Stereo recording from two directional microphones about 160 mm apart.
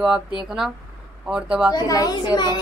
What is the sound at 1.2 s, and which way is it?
Speech, 5° right (ahead or behind).